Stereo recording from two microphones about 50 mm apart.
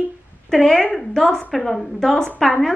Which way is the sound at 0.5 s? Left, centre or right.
Centre.